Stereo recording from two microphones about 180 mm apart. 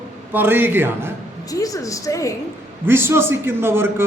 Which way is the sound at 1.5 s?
20° left (ahead or behind).